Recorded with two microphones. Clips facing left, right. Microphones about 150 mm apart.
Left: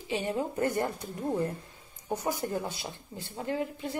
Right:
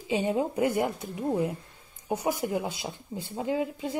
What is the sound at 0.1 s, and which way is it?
Speech, 20° right (ahead or behind).